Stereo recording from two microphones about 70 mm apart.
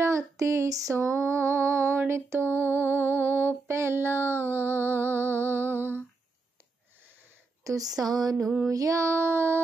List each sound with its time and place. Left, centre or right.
0.0 s female singing: right
7.6 s speech: right
8.0 s music: right
8.6 s female singing: right